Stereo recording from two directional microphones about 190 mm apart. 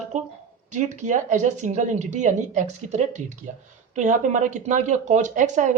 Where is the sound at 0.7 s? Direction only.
40° right (ahead or behind).